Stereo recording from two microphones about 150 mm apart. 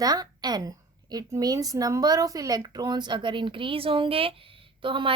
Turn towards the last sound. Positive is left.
turn(degrees=-35)  # may be behind; listen again after turning